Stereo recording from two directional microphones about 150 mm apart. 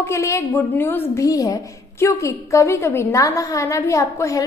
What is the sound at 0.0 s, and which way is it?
A woman's voice, 20° left (ahead or behind).